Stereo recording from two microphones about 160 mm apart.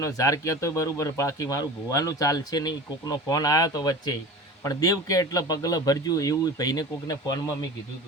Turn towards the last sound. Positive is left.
turn(degrees=25)  # may be behind; listen again after turning